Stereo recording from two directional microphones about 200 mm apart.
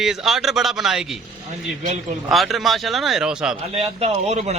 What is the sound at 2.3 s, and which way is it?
Speech, centre (ahead or behind).